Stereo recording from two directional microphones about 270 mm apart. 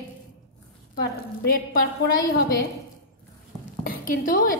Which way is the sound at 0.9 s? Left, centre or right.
Left.